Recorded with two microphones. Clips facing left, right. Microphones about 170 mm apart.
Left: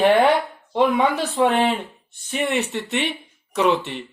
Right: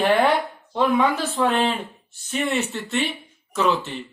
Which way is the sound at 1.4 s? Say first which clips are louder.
Left 3 dB; 15° left (ahead or behind).